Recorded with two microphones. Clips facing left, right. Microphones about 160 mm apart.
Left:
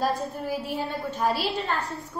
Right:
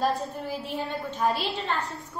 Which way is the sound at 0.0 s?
5° left (ahead or behind).